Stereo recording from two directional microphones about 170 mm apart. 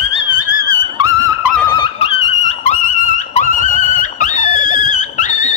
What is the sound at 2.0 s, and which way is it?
Music, 35° left (ahead or behind).